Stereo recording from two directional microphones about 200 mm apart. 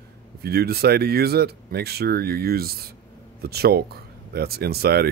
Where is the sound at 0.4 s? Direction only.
50° right (ahead or behind).